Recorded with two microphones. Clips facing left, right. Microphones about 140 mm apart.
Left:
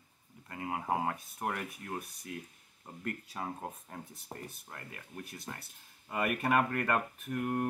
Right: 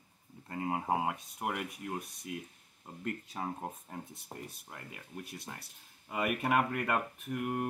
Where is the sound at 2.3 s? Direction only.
20° right (ahead or behind).